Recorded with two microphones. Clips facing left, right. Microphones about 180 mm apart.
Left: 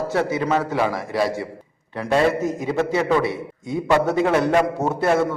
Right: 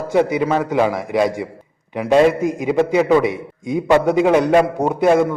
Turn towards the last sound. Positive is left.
turn(degrees=-15)  # may be behind; listen again after turning